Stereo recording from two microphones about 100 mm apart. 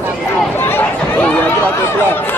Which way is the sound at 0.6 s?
20° left (ahead or behind).